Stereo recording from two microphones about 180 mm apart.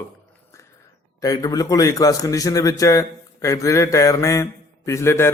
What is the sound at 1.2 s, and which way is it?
A man's voice, 20° left (ahead or behind).